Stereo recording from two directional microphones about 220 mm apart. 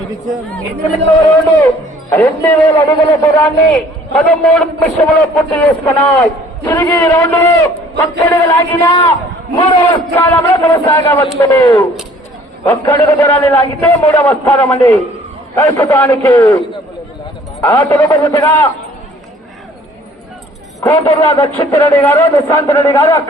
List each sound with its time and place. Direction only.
2.0 s a man's voice: 10° left (ahead or behind)
3.4 s a man's voice: 5° left (ahead or behind)
17.6 s a man's voice: 10° left (ahead or behind)
20.8 s a man's voice: 15° left (ahead or behind)